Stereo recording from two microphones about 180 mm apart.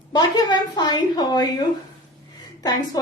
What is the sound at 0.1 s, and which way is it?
A woman's voice, 25° left (ahead or behind).